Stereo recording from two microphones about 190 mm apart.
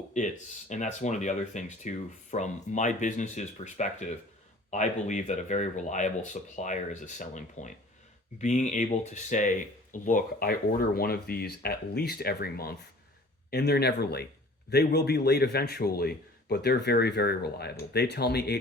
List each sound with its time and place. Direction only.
0.1 s a man's voice: 40° left (ahead or behind); by 18.6 s 60° left (ahead or behind)